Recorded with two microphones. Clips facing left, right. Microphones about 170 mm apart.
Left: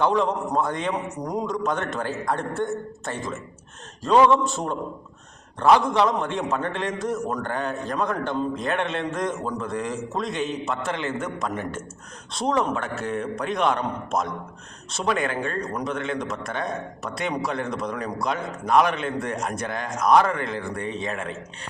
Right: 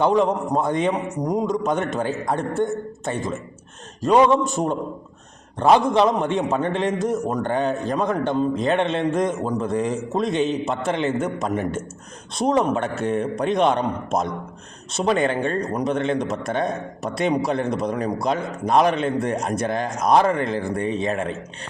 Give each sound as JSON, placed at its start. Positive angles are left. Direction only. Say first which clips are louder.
{"t": 0.0, "sound": "a man's voice", "louder": "right 3 dB", "side_deg": -20}